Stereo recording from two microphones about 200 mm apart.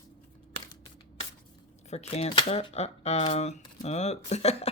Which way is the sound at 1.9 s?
35° left (ahead or behind).